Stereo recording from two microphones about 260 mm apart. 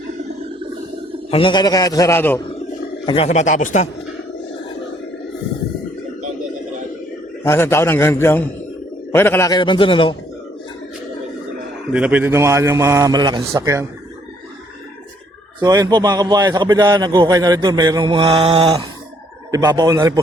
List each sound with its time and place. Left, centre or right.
1.3 s a man's voice: centre
3.1 s a man's voice: left
7.4 s a man's voice: centre
11.9 s a man's voice: centre
15.6 s a man's voice: centre